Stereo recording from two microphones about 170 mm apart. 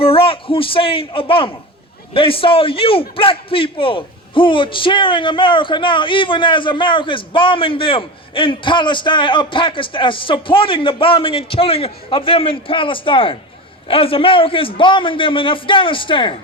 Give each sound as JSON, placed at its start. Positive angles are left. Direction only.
{"t": 0.0, "sound": "a man's voice", "side_deg": 35}